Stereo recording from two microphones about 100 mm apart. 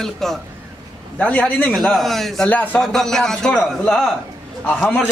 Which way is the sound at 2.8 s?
5° left (ahead or behind).